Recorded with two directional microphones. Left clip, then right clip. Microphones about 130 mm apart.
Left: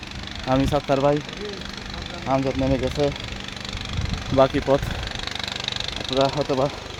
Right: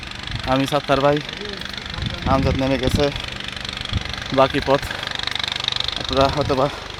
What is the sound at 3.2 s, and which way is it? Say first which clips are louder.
Engine: right 4 dB; 35° left (ahead or behind).